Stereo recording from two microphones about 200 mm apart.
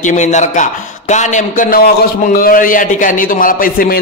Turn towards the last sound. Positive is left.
turn(degrees=45)  # may be behind; listen again after turning